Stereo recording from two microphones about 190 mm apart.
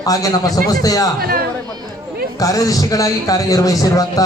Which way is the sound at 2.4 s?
20° left (ahead or behind).